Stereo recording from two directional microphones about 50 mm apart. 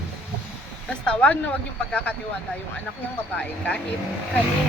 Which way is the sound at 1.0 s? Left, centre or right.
Left.